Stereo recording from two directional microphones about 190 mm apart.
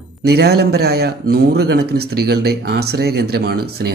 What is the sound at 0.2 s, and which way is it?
A man's voice, 60° right (ahead or behind).